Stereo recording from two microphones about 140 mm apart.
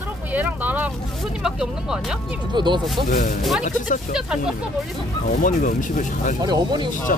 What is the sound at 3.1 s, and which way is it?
Speech, 80° left.